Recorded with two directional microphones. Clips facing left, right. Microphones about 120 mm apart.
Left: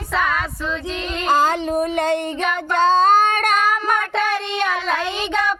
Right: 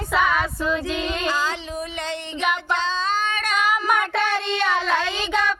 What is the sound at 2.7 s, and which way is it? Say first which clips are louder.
Child singing: left 10 dB; 50° left (ahead or behind).